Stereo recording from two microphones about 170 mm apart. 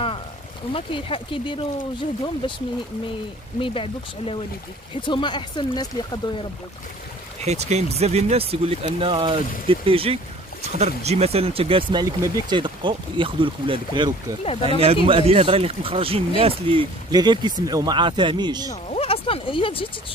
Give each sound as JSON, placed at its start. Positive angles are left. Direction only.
{"t": 0.7, "sound": "speech", "side_deg": 30}
{"t": 3.6, "sound": "speech", "side_deg": 30}
{"t": 7.4, "sound": "speech", "side_deg": -40}
{"t": 18.9, "sound": "a sound", "side_deg": 35}